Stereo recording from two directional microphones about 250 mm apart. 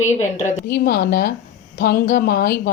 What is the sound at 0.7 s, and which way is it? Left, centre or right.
A woman's voice, left.